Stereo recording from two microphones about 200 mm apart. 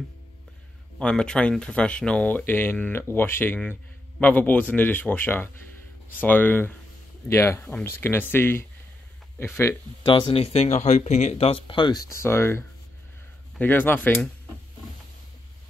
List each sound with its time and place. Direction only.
0.9 s speech: 5° left (ahead or behind)